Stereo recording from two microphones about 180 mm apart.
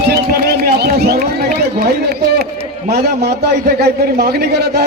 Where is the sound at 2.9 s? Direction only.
65° right (ahead or behind).